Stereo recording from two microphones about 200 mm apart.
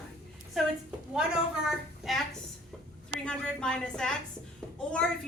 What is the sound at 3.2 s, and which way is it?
A woman's voice, 5° left (ahead or behind).